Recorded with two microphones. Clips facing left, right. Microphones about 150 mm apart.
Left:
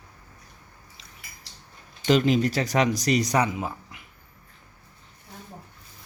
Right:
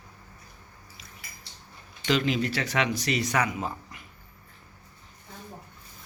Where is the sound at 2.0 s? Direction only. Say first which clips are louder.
Left 5 dB; 40° left (ahead or behind).